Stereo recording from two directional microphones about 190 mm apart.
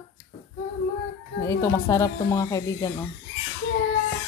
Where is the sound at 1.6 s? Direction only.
15° left (ahead or behind).